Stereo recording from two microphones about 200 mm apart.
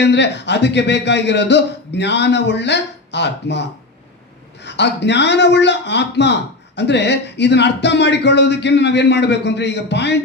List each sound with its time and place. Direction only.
0.0 s a man's voice: 60° left (ahead or behind)